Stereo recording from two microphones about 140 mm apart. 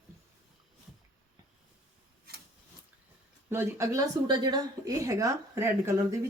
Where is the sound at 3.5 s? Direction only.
20° right (ahead or behind).